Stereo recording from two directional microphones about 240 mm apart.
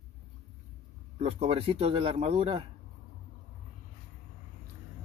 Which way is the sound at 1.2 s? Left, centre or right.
Right.